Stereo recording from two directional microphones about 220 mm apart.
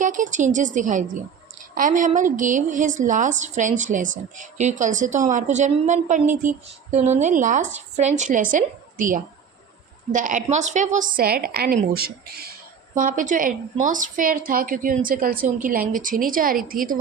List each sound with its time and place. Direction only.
0.0 s a woman's voice: 35° right (ahead or behind)